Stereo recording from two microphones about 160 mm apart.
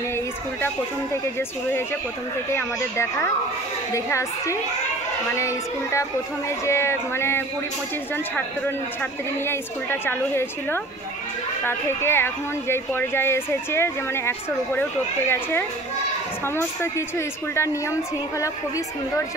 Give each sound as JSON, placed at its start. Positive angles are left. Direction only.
{"t": 2.5, "sound": "a woman's voice", "side_deg": 15}